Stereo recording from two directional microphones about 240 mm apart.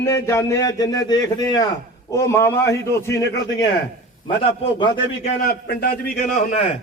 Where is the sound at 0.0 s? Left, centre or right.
Centre.